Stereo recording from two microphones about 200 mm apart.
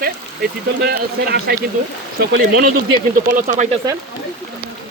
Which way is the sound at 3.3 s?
35° right (ahead or behind).